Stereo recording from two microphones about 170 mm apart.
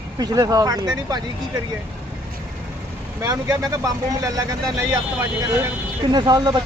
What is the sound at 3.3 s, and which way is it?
Speech, 20° right (ahead or behind).